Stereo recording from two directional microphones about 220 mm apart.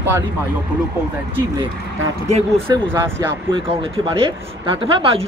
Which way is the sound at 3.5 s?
25° right (ahead or behind).